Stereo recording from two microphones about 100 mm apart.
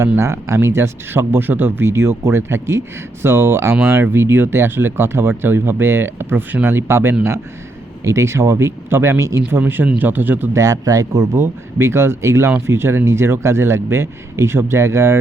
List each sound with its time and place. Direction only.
0.0 s speech: 30° right (ahead or behind)
10.6 s speech: 35° right (ahead or behind)